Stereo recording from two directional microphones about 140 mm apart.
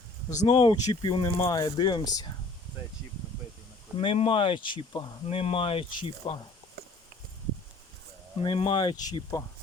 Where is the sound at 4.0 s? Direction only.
40° left (ahead or behind).